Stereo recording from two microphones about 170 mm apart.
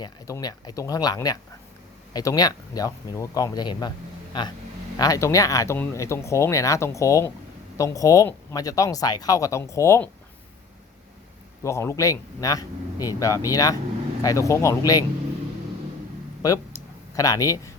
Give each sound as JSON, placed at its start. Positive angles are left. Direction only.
{"t": 0.0, "sound": "speech", "side_deg": 20}
{"t": 4.9, "sound": "speech", "side_deg": 20}
{"t": 11.6, "sound": "speech", "side_deg": 15}
{"t": 16.4, "sound": "speech", "side_deg": 20}